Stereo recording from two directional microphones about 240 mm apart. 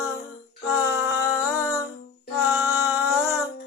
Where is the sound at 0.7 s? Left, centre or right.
Centre.